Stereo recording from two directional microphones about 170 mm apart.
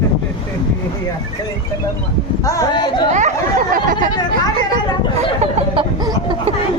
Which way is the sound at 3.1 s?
50° right (ahead or behind).